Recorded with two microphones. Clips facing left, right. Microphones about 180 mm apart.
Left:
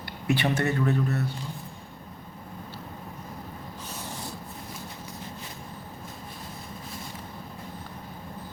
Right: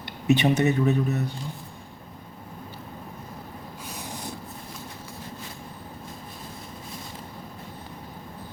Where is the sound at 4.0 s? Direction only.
15° right (ahead or behind).